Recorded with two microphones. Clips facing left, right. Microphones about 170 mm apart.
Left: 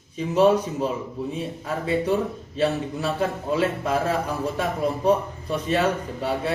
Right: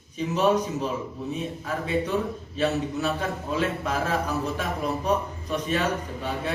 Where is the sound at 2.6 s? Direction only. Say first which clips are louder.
Left 2 dB; 30° left (ahead or behind).